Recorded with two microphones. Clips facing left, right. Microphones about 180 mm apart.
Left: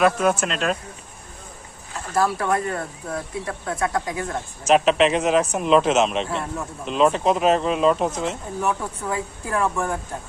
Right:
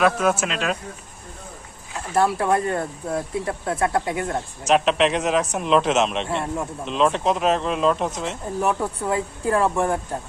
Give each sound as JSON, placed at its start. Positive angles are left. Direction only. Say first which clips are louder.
{"t": 0.0, "sound": "speech", "louder": "left 1 dB", "side_deg": 0}
{"t": 2.1, "sound": "speech", "louder": "right 2 dB", "side_deg": -25}
{"t": 4.6, "sound": "speech", "louder": "left 2 dB", "side_deg": 0}
{"t": 8.6, "sound": "speech", "louder": "right 2 dB", "side_deg": -30}